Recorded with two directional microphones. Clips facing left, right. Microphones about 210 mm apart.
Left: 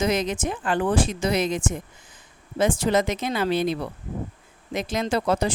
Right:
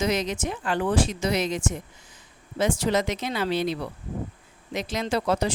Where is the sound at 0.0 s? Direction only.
50° left (ahead or behind).